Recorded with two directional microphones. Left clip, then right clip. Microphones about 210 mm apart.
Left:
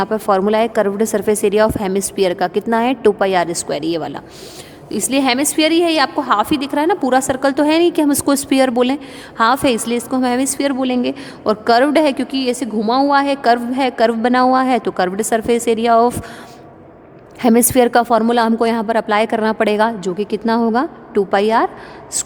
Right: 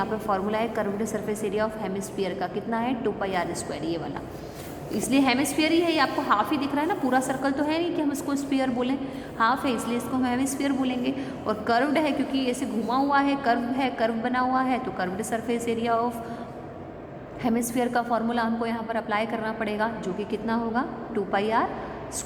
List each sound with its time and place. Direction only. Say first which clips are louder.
0.0 s a woman's voice: left 11 dB; 55° left (ahead or behind)
17.4 s a woman's voice: left 14 dB; 55° left (ahead or behind)